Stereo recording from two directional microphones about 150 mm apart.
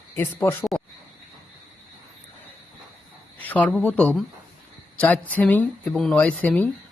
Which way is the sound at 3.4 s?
10° left (ahead or behind).